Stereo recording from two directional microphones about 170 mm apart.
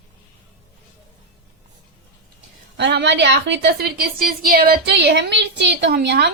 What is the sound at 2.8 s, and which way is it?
A woman's voice, 90° right.